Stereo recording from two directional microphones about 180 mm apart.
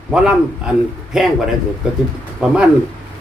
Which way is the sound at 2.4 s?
5° right (ahead or behind).